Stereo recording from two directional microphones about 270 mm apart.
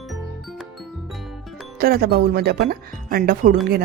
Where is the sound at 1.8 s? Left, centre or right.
Right.